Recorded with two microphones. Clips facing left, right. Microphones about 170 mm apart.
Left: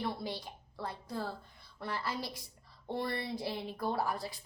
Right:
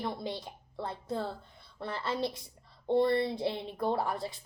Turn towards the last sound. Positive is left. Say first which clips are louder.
# right 3 dB
turn(degrees=-25)  # may be behind; listen again after turning